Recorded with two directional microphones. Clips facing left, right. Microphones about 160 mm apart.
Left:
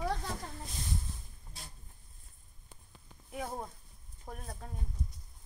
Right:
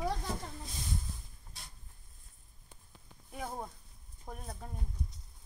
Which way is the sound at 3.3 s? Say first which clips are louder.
Left 1 dB; 5° left (ahead or behind).